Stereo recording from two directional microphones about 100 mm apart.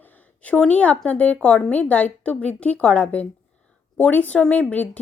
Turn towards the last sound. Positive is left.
turn(degrees=15)  # may be behind; listen again after turning